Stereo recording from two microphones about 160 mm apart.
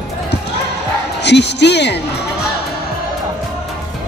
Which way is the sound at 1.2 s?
90° left.